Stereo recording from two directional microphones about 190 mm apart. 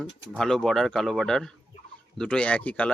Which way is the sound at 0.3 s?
Centre (ahead or behind).